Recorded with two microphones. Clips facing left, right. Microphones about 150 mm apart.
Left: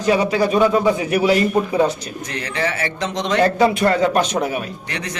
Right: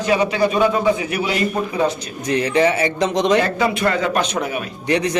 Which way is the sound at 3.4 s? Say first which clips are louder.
Left 3 dB; 30° left (ahead or behind).